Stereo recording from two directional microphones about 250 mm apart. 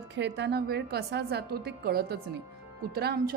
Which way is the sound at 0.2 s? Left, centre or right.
Right.